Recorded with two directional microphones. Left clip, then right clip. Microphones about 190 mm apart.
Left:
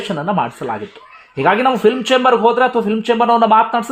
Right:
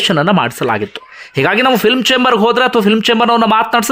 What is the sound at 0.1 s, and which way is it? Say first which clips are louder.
A man's voice: right 6 dB; 30° right (ahead or behind).